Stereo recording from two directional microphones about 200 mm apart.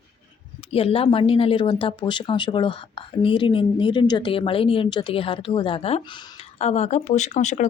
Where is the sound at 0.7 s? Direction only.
30° left (ahead or behind).